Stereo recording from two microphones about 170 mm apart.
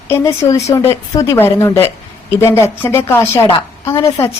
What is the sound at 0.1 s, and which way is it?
A woman's voice, 15° left (ahead or behind).